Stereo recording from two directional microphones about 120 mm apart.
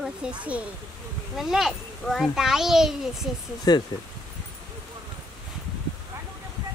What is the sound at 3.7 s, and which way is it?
Speech, 35° left (ahead or behind).